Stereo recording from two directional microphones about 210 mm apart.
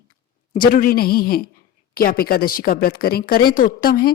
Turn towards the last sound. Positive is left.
turn(degrees=45)  # may be behind; listen again after turning